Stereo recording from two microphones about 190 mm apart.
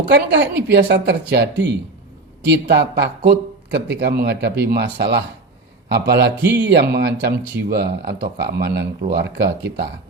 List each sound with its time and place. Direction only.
0.1 s speech: 65° right (ahead or behind)